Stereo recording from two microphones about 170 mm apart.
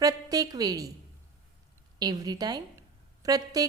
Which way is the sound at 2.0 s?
25° right (ahead or behind).